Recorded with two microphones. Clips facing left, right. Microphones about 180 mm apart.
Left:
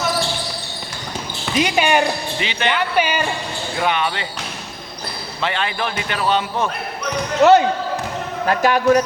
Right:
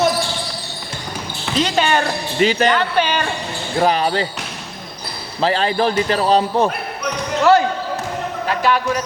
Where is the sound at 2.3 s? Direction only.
40° right (ahead or behind).